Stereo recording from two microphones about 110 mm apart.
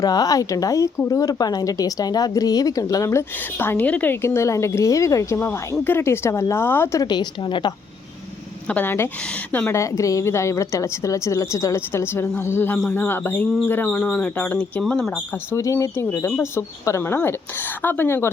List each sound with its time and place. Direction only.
0.0 s a woman's voice: 35° left (ahead or behind)
7.0 s speech: 40° left (ahead or behind)
8.6 s a woman's voice: 15° left (ahead or behind)
15.5 s a woman's voice: 25° left (ahead or behind)